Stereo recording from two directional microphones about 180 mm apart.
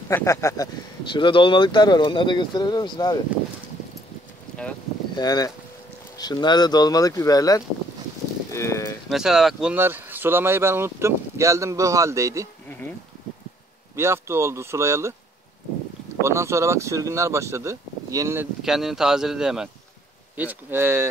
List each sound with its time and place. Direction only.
0.1 s speech: 15° left (ahead or behind)
1.1 s speech: 30° left (ahead or behind)
5.1 s speech: 20° left (ahead or behind)
8.5 s cattle: 15° left (ahead or behind)
9.1 s speech: centre (ahead or behind)
13.9 s speech: 15° right (ahead or behind)
16.2 s speech: 15° right (ahead or behind)
18.6 s speech: centre (ahead or behind)